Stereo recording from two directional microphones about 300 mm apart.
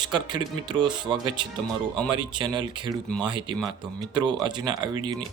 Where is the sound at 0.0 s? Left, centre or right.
Centre.